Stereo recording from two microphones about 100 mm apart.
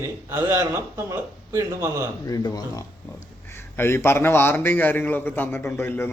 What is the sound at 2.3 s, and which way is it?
Speech, 40° left (ahead or behind).